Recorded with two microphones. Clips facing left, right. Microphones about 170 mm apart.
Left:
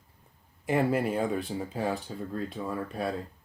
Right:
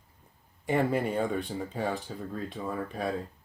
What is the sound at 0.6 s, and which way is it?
Speech, centre (ahead or behind).